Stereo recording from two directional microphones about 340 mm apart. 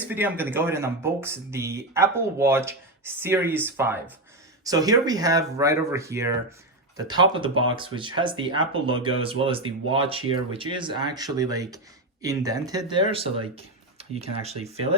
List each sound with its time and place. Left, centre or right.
0.0 s speech: centre